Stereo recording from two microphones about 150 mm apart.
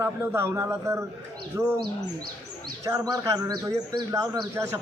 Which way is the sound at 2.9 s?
20° right (ahead or behind).